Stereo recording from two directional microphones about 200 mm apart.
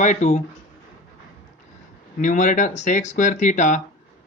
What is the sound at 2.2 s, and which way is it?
Speech, 40° left (ahead or behind).